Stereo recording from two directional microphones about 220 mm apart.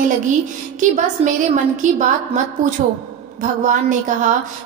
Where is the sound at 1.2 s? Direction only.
25° right (ahead or behind).